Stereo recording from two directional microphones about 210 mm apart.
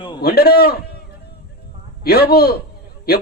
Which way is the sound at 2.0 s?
50° left (ahead or behind).